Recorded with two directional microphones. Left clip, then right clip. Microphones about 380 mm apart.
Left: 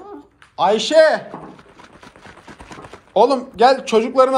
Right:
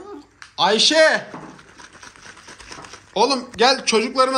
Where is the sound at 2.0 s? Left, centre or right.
Left.